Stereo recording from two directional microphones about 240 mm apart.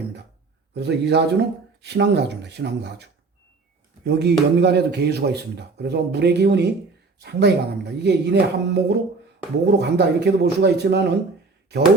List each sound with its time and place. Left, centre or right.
0.7 s a man's voice: right